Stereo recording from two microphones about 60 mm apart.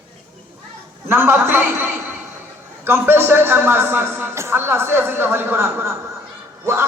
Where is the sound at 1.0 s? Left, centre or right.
Right.